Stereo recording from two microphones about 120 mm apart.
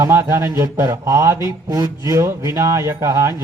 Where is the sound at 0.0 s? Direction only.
20° right (ahead or behind).